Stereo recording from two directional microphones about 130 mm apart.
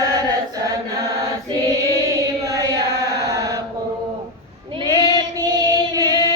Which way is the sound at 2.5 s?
25° right (ahead or behind).